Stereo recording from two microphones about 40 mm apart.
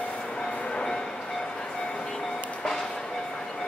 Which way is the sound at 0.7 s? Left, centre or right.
Left.